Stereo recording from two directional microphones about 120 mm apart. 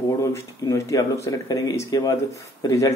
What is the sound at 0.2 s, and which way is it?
Speech, 25° left (ahead or behind).